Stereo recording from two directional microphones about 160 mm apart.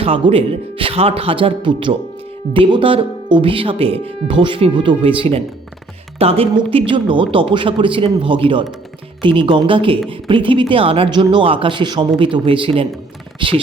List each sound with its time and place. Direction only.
0.0 s speech: 35° right (ahead or behind)